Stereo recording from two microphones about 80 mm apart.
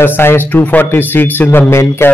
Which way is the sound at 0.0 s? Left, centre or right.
Left.